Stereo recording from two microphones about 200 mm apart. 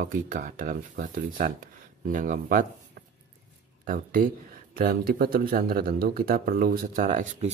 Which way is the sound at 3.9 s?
45° right (ahead or behind).